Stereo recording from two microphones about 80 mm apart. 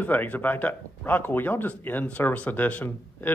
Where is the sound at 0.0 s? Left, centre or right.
Left.